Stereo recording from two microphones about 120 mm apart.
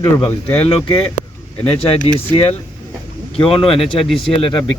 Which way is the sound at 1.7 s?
50° left (ahead or behind).